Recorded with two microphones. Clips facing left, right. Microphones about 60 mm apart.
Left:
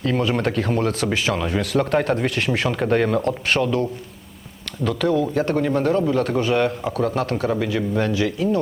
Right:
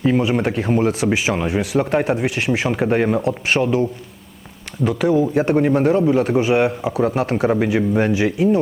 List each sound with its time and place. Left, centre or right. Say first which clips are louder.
0.2 s a man's voice: right 2 dB; centre
4.8 s a man's voice: right 3 dB; centre